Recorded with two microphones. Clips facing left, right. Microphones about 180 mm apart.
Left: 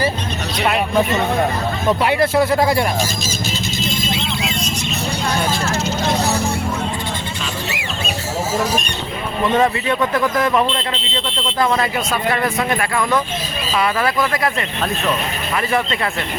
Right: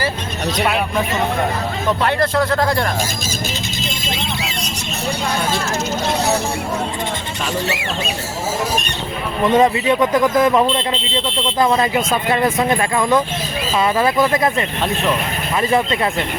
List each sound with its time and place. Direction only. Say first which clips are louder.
2.0 s speech: left 2 dB; 10° left (ahead or behind)
9.6 s speech: right 4 dB; 15° right (ahead or behind)